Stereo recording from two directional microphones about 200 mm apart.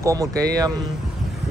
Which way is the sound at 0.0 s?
15° right (ahead or behind).